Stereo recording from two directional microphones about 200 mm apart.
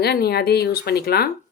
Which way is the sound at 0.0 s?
50° left (ahead or behind).